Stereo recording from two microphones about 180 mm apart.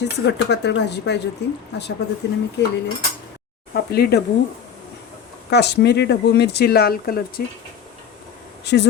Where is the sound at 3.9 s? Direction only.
60° left (ahead or behind).